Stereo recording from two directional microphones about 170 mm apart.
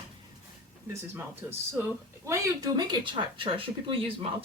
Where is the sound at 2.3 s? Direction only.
20° right (ahead or behind).